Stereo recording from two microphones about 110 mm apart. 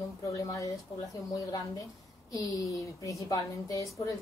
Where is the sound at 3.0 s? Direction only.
30° left (ahead or behind).